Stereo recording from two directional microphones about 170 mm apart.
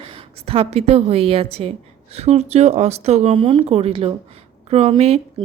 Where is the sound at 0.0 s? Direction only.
35° right (ahead or behind).